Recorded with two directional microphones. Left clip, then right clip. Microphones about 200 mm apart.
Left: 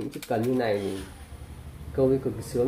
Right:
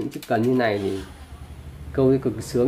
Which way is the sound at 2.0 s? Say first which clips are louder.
Right 4 dB; 35° right (ahead or behind).